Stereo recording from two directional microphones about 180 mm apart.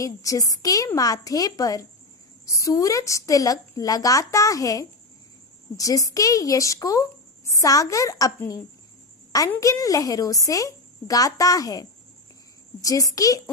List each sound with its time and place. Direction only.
0.0 s a woman's voice: 20° left (ahead or behind)